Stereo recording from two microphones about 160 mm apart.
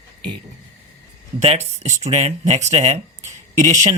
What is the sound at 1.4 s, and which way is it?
Speech, 40° right (ahead or behind).